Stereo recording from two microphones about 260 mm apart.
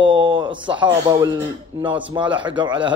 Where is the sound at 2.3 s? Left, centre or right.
Centre.